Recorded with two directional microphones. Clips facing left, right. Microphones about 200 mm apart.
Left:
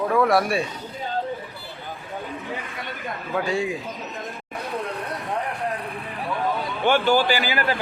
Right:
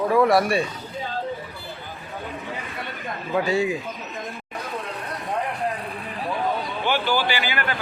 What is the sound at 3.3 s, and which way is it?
Speech, 5° right (ahead or behind).